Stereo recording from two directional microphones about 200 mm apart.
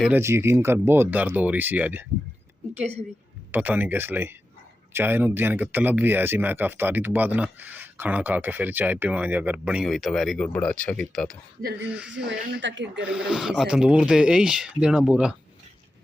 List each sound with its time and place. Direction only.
0.0 s speech: 10° right (ahead or behind)
3.5 s speech: 10° right (ahead or behind)
12.5 s speech: 65° right (ahead or behind)
13.0 s speech: 5° right (ahead or behind)